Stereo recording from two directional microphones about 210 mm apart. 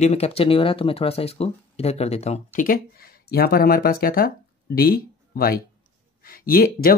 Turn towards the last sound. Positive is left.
turn(degrees=45)  # may be behind; listen again after turning